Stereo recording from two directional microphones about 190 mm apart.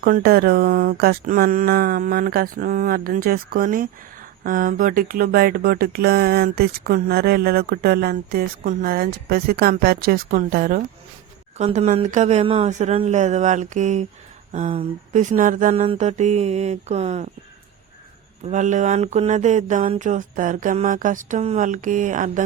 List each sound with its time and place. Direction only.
0.0 s speech: 55° right (ahead or behind)
11.5 s mantra: 35° right (ahead or behind)
15.7 s mantra: 30° right (ahead or behind)
18.4 s mantra: 40° right (ahead or behind)